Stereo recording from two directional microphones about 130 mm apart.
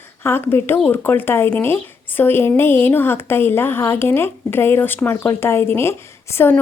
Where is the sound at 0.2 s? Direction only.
15° left (ahead or behind).